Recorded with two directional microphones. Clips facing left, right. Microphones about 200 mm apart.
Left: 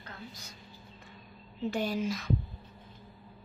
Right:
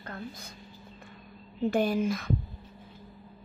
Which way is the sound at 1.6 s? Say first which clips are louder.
Right 5 dB; 55° right (ahead or behind).